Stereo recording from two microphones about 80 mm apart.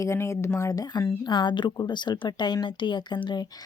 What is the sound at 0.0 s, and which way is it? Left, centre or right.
Speech, left.